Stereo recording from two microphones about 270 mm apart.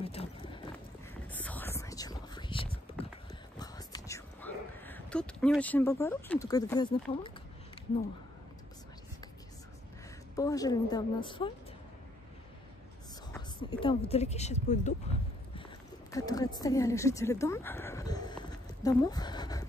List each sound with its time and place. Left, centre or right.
0.0 s horse: left
1.3 s whispering: centre
10.3 s a woman's voice: centre
13.3 s speech: centre
16.1 s a woman's voice: centre